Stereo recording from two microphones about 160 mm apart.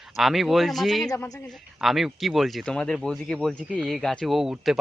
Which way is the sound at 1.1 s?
20° left (ahead or behind).